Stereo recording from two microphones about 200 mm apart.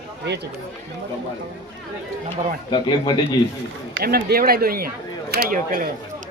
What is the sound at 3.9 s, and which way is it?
Speech, 50° right (ahead or behind).